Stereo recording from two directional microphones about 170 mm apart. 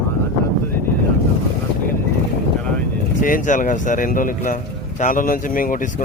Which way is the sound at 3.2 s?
50° left (ahead or behind).